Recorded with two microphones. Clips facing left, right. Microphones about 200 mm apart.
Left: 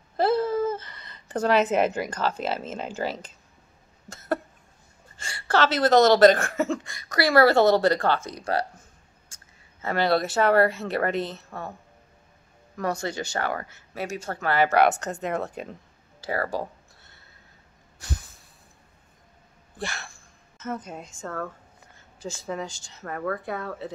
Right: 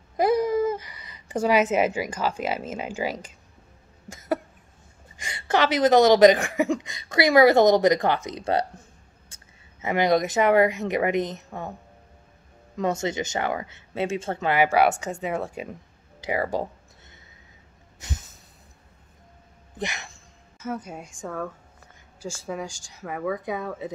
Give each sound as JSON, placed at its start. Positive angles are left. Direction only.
{"t": 0.2, "sound": "a woman's voice", "side_deg": -15}
{"t": 4.1, "sound": "cough", "side_deg": -10}
{"t": 5.1, "sound": "a woman's voice", "side_deg": -15}
{"t": 9.8, "sound": "a woman's voice", "side_deg": -15}
{"t": 12.7, "sound": "speech", "side_deg": -20}
{"t": 19.8, "sound": "a woman's voice", "side_deg": -20}